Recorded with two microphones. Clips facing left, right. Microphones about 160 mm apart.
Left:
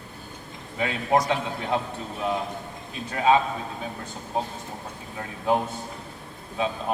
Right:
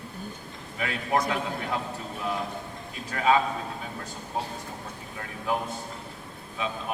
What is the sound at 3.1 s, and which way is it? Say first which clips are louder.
Speech: left 3 dB; 25° left (ahead or behind).